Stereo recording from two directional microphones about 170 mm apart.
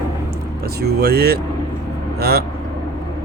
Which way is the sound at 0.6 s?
70° right (ahead or behind).